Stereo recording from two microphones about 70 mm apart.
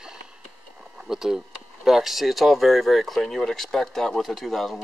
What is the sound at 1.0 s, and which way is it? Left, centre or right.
Speech, centre.